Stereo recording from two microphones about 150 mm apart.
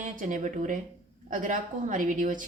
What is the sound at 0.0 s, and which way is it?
A woman's voice, 55° right (ahead or behind).